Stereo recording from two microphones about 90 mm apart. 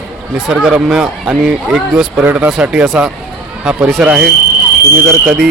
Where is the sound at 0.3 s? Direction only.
5° right (ahead or behind).